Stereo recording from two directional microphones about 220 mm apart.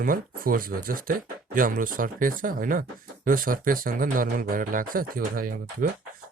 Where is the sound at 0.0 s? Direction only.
40° right (ahead or behind).